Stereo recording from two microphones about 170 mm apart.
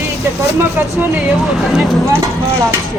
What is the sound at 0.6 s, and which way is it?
Speech, 10° right (ahead or behind).